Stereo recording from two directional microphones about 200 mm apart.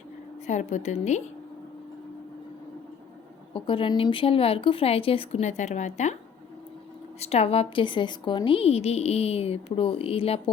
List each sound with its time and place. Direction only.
0.4 s a woman's voice: 35° left (ahead or behind)
3.5 s a woman's voice: 25° left (ahead or behind)
7.2 s a woman's voice: 30° left (ahead or behind)